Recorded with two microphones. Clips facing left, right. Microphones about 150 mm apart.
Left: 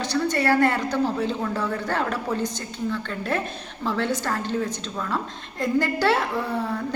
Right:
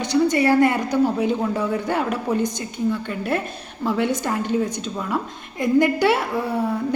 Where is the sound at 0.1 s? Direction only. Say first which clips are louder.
Right 5 dB; 15° right (ahead or behind).